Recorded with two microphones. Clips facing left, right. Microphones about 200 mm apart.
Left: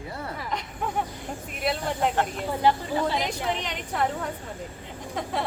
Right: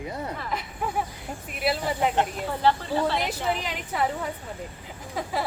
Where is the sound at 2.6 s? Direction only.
15° left (ahead or behind).